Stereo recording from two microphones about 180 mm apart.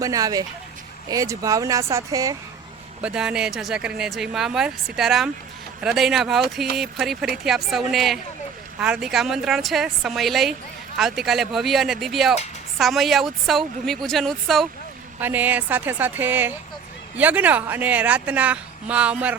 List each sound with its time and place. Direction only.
0.0 s speech: 20° right (ahead or behind)
3.0 s speech: 5° right (ahead or behind)
15.2 s speech: 10° right (ahead or behind)